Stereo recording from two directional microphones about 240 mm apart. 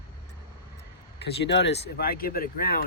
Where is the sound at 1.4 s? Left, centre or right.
Left.